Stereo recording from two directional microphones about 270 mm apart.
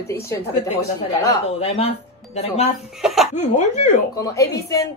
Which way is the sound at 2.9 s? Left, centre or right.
Centre.